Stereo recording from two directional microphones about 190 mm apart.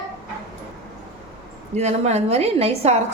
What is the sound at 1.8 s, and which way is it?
A woman's voice, 35° right (ahead or behind).